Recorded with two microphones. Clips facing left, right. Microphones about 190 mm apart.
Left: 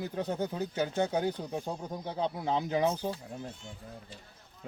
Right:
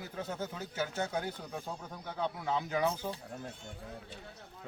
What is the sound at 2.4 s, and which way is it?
Speech, 30° left (ahead or behind).